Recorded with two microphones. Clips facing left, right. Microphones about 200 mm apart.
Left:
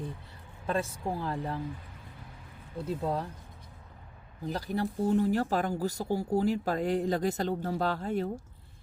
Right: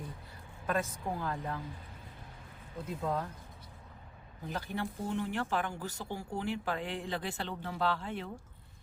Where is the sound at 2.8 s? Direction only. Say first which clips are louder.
Left 3 dB; 35° left (ahead or behind).